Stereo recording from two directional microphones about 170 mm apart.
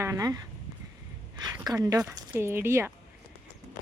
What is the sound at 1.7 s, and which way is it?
A woman's voice, 20° right (ahead or behind).